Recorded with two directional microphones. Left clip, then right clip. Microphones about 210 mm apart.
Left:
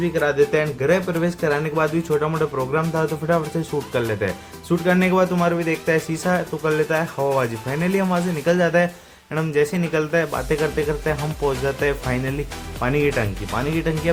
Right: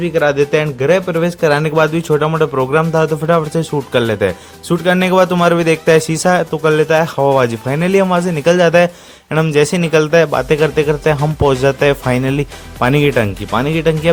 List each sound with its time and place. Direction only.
0.0 s speech: 35° right (ahead or behind)